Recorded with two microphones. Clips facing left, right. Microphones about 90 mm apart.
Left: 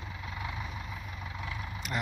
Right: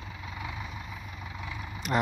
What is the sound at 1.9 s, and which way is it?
Speech, 45° right (ahead or behind).